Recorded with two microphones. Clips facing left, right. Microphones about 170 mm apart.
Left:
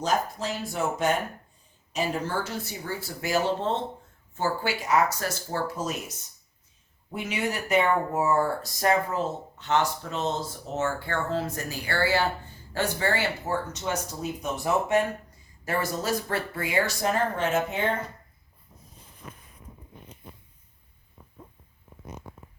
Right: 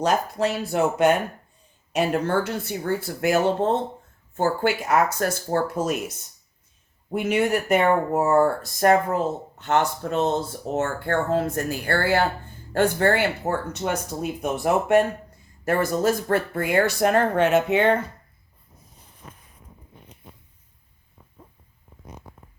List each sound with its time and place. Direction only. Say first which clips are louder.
0.0 s speech: right 5 dB; 65° right (ahead or behind)
7.1 s speech: right 8 dB; 55° right (ahead or behind); by 17.9 s 70° right (ahead or behind)